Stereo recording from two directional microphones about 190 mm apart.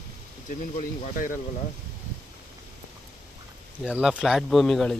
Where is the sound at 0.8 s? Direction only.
40° left (ahead or behind).